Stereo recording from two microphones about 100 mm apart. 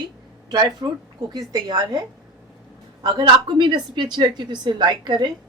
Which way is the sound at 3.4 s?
45° right (ahead or behind).